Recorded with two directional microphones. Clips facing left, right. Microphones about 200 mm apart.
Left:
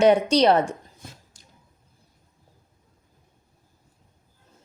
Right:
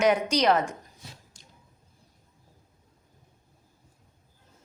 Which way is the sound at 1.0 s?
50° left (ahead or behind).